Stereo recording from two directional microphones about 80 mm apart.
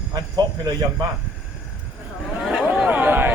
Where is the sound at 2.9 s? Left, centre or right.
Right.